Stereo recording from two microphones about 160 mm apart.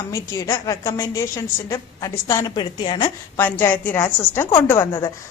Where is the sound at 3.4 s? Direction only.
10° left (ahead or behind).